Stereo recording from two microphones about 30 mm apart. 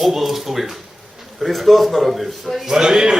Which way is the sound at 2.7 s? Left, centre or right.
Centre.